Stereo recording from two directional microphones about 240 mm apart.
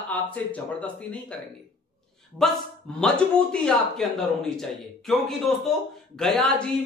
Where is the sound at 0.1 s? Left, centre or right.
Centre.